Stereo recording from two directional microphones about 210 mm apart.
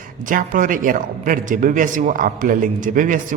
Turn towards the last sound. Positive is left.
turn(degrees=-40)  # may be behind; listen again after turning